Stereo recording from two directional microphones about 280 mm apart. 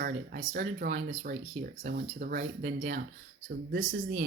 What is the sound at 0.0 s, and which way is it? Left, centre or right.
Speech, right.